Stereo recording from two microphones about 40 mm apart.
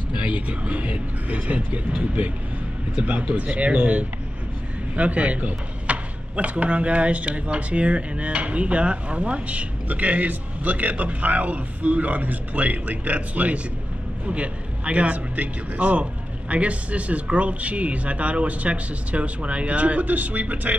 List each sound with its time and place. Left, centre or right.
0.1 s speech: right